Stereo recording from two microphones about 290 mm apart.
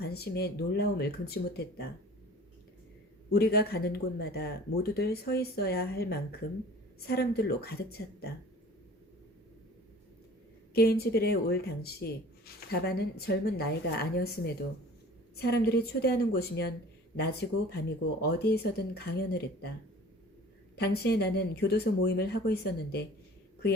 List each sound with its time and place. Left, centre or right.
0.0 s speech: left
3.3 s speech: left
10.8 s speech: left
20.7 s speech: left